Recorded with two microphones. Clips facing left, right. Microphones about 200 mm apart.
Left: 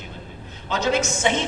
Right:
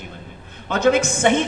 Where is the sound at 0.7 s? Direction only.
55° right (ahead or behind).